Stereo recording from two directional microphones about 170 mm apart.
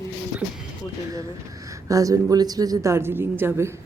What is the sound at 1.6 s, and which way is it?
A woman's voice, 20° right (ahead or behind).